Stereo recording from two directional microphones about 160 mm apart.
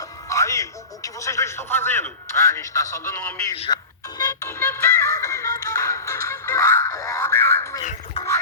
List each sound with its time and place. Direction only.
0.3 s speech: 20° left (ahead or behind)
3.7 s speech: 25° left (ahead or behind)
4.2 s music: 20° left (ahead or behind)